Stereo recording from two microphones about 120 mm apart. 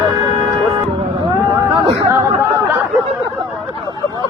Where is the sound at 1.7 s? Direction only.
25° right (ahead or behind).